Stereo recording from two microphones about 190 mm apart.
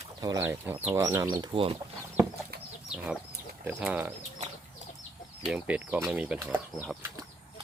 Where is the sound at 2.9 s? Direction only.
5° right (ahead or behind).